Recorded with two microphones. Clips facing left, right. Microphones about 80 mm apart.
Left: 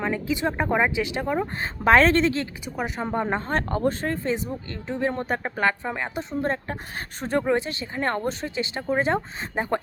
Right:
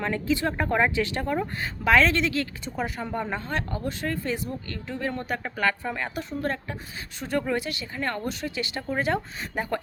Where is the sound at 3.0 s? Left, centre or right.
Left.